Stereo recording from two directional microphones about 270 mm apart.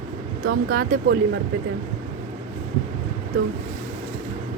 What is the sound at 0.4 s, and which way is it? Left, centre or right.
Speech, right.